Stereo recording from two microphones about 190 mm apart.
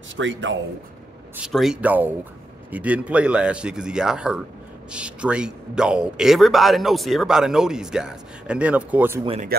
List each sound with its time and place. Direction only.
0.1 s a man's voice: 80° right
1.3 s a man's voice: 5° right (ahead or behind)
9.5 s speech: 50° right (ahead or behind)